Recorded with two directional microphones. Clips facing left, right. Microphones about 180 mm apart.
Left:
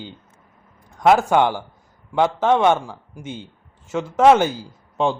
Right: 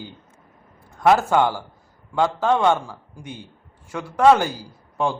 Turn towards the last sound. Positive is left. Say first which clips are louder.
# left 3 dB
turn(degrees=20)  # may be behind; listen again after turning